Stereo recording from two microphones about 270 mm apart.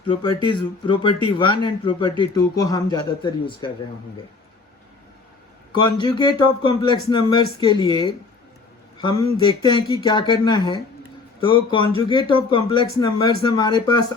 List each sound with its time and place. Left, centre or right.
0.4 s speech: centre
5.7 s speech: centre